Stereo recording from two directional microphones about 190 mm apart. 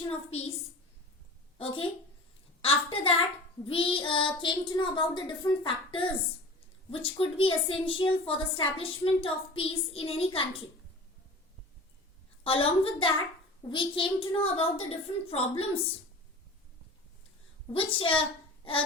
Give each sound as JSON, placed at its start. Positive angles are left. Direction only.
{"t": 0.1, "sound": "a woman's voice", "side_deg": 35}
{"t": 1.5, "sound": "a woman's voice", "side_deg": 30}
{"t": 12.4, "sound": "a woman's voice", "side_deg": 30}
{"t": 17.7, "sound": "a woman's voice", "side_deg": 30}